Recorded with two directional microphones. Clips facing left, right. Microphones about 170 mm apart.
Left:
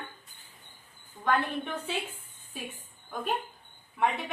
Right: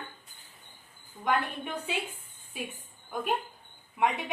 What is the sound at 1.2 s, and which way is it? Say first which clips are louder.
Speech: left 1 dB; 10° right (ahead or behind).